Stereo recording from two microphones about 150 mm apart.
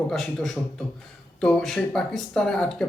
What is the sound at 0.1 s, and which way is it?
Speech, centre (ahead or behind).